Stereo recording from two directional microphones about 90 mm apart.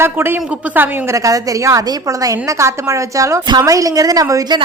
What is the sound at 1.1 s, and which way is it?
A woman's voice, 40° right (ahead or behind).